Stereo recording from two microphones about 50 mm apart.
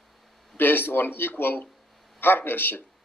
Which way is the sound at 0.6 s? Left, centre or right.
Left.